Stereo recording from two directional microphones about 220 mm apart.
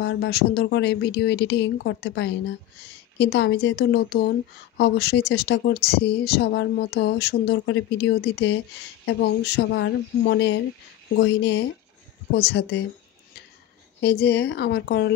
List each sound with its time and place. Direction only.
0.0 s speech: 50° left (ahead or behind)
14.0 s speech: 50° left (ahead or behind)